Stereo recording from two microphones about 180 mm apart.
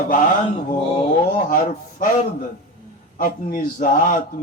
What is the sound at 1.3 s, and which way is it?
Speech, 45° left (ahead or behind).